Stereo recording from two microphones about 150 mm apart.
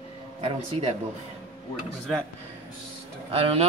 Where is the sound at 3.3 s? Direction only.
40° right (ahead or behind).